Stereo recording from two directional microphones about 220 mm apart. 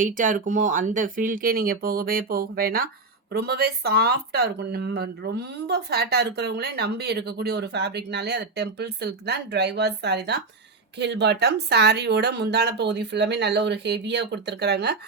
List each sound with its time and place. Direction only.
0.0 s speech: 35° right (ahead or behind)